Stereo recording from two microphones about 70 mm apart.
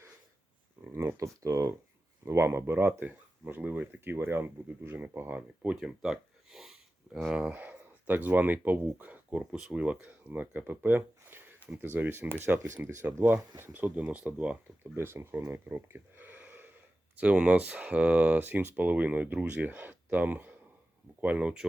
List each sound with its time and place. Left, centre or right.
0.9 s speech: right
5.7 s speech: centre
7.6 s speech: right
14.9 s speech: right
15.5 s a sound: right
17.2 s speech: centre